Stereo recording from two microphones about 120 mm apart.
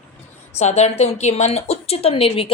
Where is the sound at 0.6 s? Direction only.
65° left (ahead or behind).